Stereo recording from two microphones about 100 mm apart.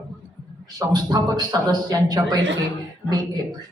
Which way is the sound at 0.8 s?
40° right (ahead or behind).